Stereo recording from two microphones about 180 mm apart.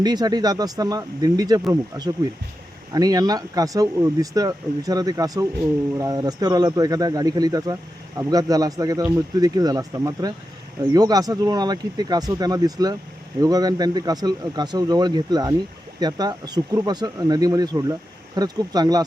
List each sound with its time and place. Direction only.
0.0 s speech: 20° right (ahead or behind)